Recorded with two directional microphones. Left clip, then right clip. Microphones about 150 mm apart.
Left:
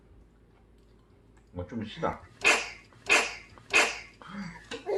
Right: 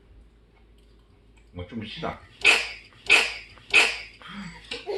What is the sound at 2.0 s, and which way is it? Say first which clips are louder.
Speech: left 2 dB; 20° right (ahead or behind).